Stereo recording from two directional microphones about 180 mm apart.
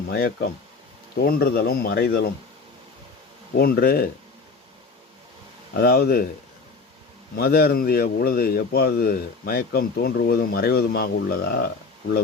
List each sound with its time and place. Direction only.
0.1 s speech: 60° left (ahead or behind)
3.6 s speech: 55° left (ahead or behind)
5.7 s speech: 60° left (ahead or behind)
7.3 s speech: 60° left (ahead or behind)